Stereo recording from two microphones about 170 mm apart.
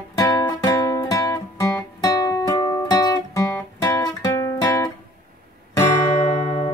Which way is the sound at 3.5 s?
15° left (ahead or behind).